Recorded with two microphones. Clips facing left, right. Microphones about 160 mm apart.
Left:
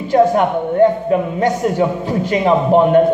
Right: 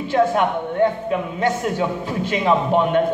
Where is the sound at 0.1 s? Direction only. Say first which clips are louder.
Left 5 dB; 40° left (ahead or behind).